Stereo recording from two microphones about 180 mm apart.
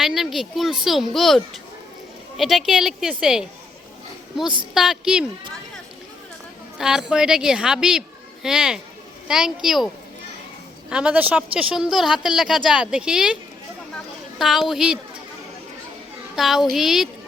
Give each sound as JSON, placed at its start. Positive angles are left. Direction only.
{"t": 0.0, "sound": "a woman's voice", "side_deg": 0}
{"t": 2.4, "sound": "a woman's voice", "side_deg": 0}
{"t": 6.7, "sound": "a child's voice", "side_deg": -5}
{"t": 13.9, "sound": "a sound", "side_deg": 0}
{"t": 16.3, "sound": "a woman's voice", "side_deg": 0}